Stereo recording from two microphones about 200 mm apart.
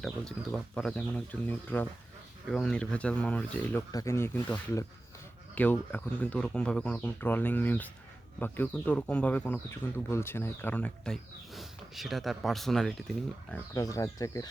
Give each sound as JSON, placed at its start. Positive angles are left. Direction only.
{"t": 0.0, "sound": "speech", "side_deg": 5}
{"t": 13.7, "sound": "speech", "side_deg": 15}